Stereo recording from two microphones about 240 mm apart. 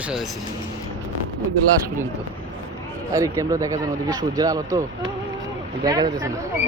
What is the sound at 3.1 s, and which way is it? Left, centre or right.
Speech, centre.